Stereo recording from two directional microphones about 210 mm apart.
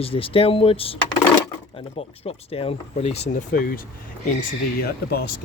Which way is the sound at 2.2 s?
25° left (ahead or behind).